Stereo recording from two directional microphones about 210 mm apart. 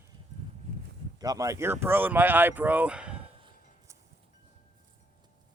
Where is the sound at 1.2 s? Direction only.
15° right (ahead or behind).